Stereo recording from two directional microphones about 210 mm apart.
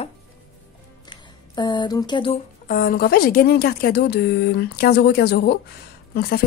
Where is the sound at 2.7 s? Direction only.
45° left (ahead or behind).